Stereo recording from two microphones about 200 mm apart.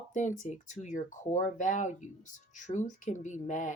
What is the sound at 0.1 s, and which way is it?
Speech, 40° left (ahead or behind).